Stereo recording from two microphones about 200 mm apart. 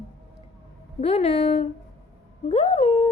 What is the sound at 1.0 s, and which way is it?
Speech, 30° left (ahead or behind).